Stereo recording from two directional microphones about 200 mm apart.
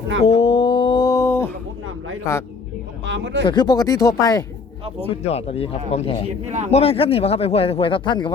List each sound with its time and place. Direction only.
0.2 s a sound: 30° left (ahead or behind); by 1.5 s 10° left (ahead or behind)
2.3 s a man's voice: 15° left (ahead or behind)
3.0 s speech: 65° right (ahead or behind)
3.4 s speech: 20° left (ahead or behind)
5.0 s speech: 30° left (ahead or behind)
6.4 s a man's voice: 35° right (ahead or behind)
6.7 s speech: 30° left (ahead or behind)